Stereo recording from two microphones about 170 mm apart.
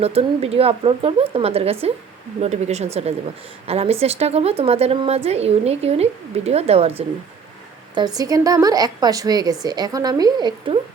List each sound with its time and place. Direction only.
0.0 s a woman's voice: 35° right (ahead or behind)
7.9 s a woman's voice: 25° right (ahead or behind)